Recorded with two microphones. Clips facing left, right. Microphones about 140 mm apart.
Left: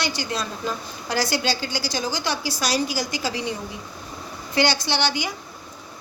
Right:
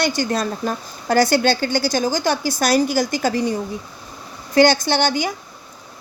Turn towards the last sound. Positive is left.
turn(degrees=-50)  # may be behind; listen again after turning